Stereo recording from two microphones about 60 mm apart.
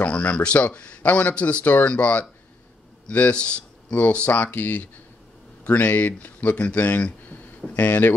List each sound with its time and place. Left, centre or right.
0.0 s speech: left
1.6 s speech: left